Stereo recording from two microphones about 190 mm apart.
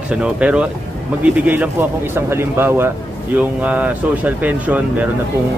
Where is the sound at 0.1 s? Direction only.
5° right (ahead or behind).